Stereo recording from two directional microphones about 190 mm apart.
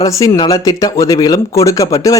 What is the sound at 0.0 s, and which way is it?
Speech, 15° left (ahead or behind).